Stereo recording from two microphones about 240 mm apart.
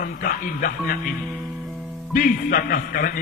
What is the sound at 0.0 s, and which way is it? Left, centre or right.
A man's voice, left.